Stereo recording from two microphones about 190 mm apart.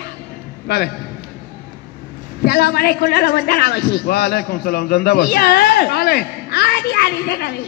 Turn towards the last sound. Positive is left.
turn(degrees=60)  # may be behind; listen again after turning